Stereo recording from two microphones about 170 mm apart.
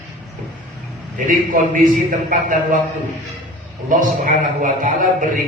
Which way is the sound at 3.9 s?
50° right (ahead or behind).